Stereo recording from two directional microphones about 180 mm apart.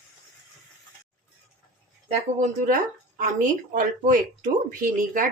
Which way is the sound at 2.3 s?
45° right (ahead or behind).